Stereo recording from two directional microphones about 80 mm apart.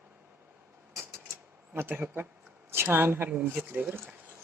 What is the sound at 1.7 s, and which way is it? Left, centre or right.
Speech, right.